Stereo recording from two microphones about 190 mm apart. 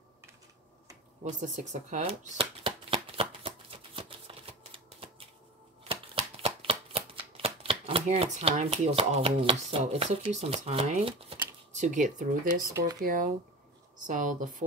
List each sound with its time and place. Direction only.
1.2 s shuffling cards: 40° right (ahead or behind)
13.0 s speech: 45° right (ahead or behind)